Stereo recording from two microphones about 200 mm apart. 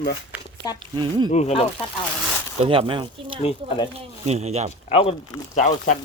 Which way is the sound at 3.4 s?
30° left (ahead or behind).